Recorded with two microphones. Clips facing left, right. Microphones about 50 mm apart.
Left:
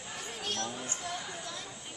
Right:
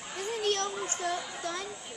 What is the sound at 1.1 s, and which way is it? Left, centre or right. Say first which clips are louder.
Children playing: right 6 dB; right.